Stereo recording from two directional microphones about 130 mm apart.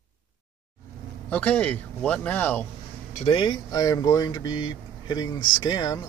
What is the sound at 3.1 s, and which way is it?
Speech, 50° left (ahead or behind).